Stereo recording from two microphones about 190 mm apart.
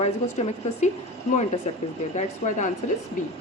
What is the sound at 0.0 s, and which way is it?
A woman's voice, 35° left (ahead or behind).